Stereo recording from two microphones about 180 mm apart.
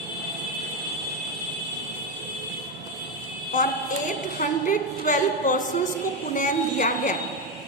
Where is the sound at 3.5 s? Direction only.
45° left (ahead or behind).